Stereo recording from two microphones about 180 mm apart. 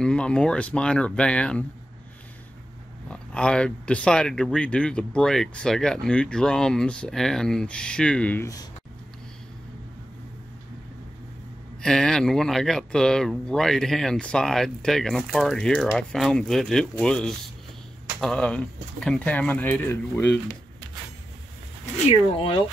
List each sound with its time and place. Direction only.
0.0 s speech: 5° left (ahead or behind)
3.1 s speech: 5° left (ahead or behind)
11.8 s speech: 5° left (ahead or behind)
22.4 s speech: 30° left (ahead or behind)